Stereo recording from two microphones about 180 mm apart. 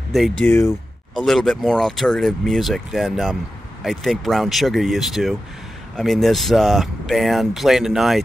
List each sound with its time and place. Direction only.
0.4 s speech: 15° left (ahead or behind)
1.1 s speech: centre (ahead or behind)